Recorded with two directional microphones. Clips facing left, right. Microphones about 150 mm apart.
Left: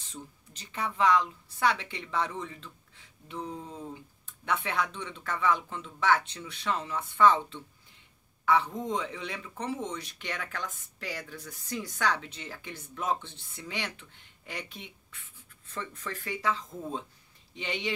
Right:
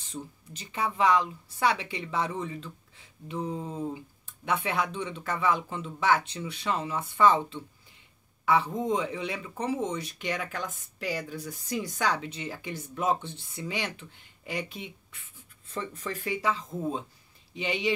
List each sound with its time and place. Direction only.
0.1 s speech: 10° right (ahead or behind)
15.7 s speech: 20° right (ahead or behind)